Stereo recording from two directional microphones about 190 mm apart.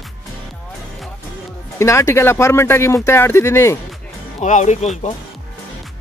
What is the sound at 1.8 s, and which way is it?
Speech, 15° left (ahead or behind).